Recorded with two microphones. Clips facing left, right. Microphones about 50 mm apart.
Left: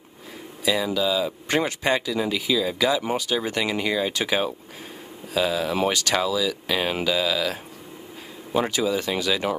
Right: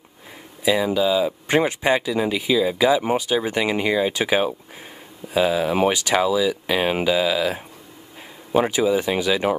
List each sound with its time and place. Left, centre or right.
0.7 s speech: centre